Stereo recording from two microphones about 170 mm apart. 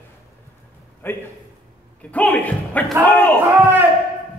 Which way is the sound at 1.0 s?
15° left (ahead or behind).